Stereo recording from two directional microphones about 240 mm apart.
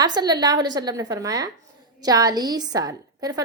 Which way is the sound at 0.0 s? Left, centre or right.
Centre.